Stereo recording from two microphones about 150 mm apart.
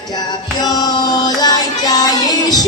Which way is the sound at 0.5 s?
25° left (ahead or behind).